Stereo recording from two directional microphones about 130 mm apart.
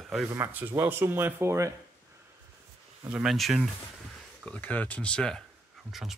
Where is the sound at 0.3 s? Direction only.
20° right (ahead or behind).